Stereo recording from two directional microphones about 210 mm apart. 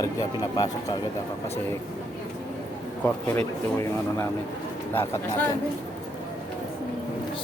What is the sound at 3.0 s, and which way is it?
Speech, 10° left (ahead or behind).